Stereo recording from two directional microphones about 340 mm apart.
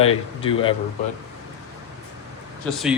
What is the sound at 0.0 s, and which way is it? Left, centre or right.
Speech, centre.